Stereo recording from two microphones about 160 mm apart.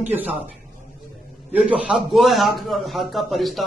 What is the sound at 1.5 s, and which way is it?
A man's voice, 5° right (ahead or behind).